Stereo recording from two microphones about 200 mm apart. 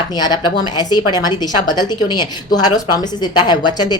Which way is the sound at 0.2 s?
20° left (ahead or behind).